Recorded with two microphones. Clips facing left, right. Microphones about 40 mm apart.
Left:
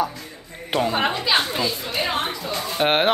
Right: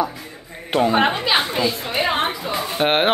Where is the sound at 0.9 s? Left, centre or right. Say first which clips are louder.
Right 3 dB; right.